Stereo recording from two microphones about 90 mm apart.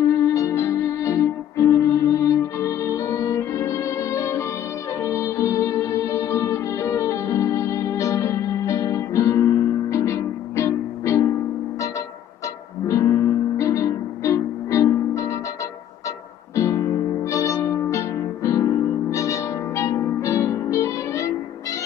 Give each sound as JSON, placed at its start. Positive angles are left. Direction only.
{"t": 0.0, "sound": "music", "side_deg": 35}
{"t": 12.8, "sound": "music", "side_deg": 35}
{"t": 16.5, "sound": "music", "side_deg": 35}